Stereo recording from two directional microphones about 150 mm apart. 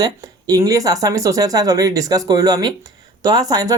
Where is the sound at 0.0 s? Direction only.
25° right (ahead or behind).